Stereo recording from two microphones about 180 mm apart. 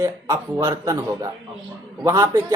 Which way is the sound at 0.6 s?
20° right (ahead or behind).